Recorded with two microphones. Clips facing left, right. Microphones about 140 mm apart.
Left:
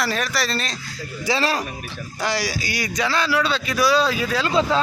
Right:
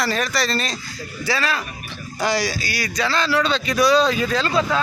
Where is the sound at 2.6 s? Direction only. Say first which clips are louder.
Even; 20° left (ahead or behind).